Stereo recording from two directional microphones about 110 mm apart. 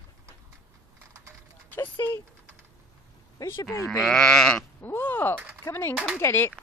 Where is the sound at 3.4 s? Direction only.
25° left (ahead or behind).